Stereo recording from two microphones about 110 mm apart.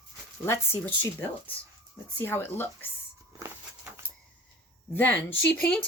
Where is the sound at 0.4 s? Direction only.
25° left (ahead or behind).